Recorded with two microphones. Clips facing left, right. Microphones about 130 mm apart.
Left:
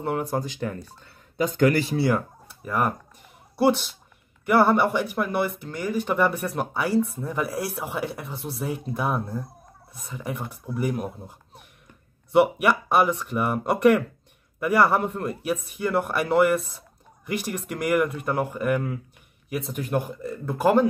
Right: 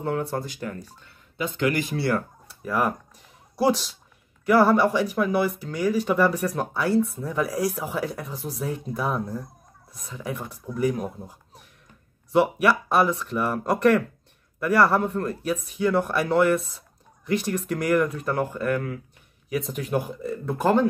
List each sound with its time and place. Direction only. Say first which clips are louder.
0.0 s speech: left 1 dB; 10° left (ahead or behind)
1.4 s speech: left 4 dB; 40° left (ahead or behind)
2.0 s speech: left 2 dB; 20° left (ahead or behind)
2.4 s a sound: even; centre (ahead or behind)
3.5 s speech: left 1 dB; centre (ahead or behind)